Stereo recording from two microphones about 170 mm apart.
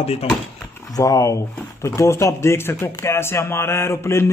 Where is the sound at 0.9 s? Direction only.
20° left (ahead or behind).